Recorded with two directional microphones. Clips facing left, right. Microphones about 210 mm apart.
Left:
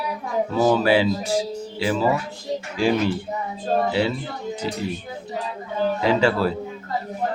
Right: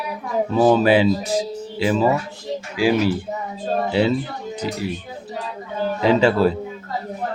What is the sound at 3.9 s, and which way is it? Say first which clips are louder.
Speech: right 4 dB; 20° right (ahead or behind).